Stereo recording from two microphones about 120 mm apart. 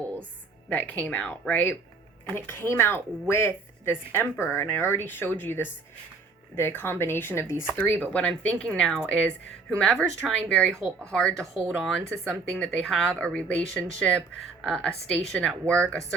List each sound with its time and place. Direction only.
0.7 s a woman's voice: 15° left (ahead or behind)